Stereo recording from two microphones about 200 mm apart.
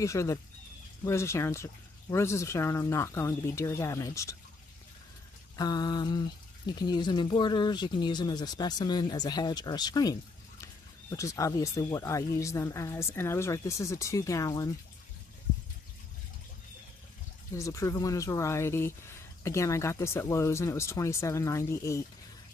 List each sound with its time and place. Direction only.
0.0 s speech: 15° left (ahead or behind)
5.6 s speech: 20° left (ahead or behind)
17.6 s speech: 15° left (ahead or behind)